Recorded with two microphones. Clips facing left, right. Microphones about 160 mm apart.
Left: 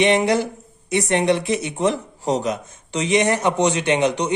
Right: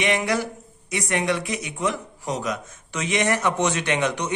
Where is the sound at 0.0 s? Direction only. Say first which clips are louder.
Left 6 dB; 25° left (ahead or behind).